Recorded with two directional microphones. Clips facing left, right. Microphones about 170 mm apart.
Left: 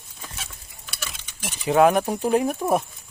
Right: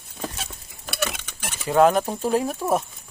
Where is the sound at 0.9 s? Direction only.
65° right (ahead or behind).